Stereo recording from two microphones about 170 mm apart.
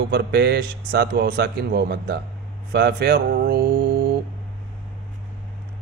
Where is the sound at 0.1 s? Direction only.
75° right (ahead or behind).